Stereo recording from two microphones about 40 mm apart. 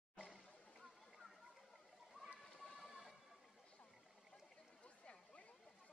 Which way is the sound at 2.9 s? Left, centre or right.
Centre.